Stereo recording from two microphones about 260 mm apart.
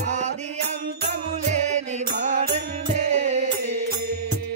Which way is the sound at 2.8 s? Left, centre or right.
Right.